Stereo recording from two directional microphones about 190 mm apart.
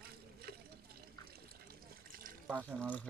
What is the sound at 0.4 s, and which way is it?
Water, 55° right (ahead or behind).